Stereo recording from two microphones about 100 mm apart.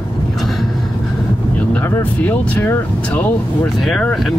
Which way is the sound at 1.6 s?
20° left (ahead or behind).